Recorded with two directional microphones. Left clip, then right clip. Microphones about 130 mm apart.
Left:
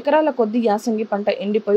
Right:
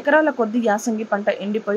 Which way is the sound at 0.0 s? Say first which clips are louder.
Even; 40° left (ahead or behind).